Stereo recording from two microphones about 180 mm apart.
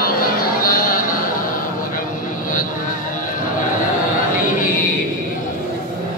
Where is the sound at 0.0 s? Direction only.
55° left (ahead or behind).